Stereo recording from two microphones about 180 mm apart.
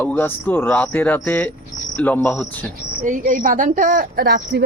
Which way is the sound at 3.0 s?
45° right (ahead or behind).